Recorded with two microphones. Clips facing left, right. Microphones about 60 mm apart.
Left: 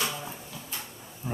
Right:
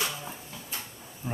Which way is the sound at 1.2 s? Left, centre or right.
Centre.